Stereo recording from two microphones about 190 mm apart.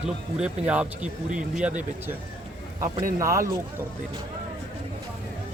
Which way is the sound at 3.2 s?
15° right (ahead or behind).